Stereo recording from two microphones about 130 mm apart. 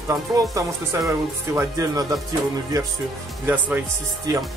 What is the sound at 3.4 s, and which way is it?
Speech, 15° right (ahead or behind).